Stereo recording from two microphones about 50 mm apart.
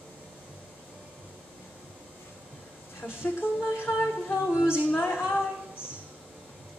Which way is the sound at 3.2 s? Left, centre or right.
Left.